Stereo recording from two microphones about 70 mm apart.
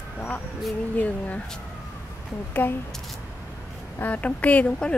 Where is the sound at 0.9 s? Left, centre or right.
Left.